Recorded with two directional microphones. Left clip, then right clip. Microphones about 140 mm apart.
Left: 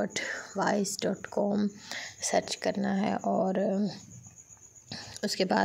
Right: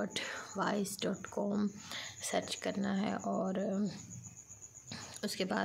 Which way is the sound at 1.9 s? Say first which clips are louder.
Left 9 dB; 45° left (ahead or behind).